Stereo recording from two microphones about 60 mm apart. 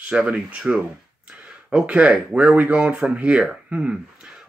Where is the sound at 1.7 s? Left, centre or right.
Centre.